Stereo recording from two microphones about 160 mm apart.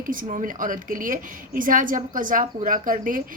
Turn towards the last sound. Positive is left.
turn(degrees=-60)  # may be behind; listen again after turning